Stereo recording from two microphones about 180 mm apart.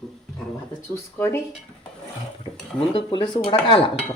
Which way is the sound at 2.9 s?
25° left (ahead or behind).